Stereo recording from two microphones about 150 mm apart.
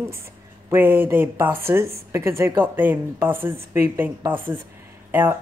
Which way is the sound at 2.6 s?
15° right (ahead or behind).